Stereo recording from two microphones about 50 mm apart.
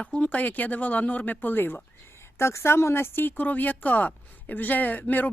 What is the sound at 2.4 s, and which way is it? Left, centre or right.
Speech, left.